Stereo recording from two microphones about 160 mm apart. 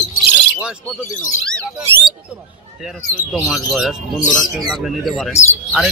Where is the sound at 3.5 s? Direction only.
Centre (ahead or behind).